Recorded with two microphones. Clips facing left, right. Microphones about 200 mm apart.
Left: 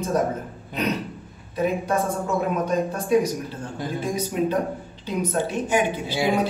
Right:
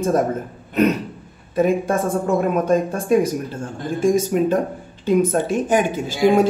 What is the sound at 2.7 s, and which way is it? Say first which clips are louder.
Speech: right 3 dB; 50° right (ahead or behind).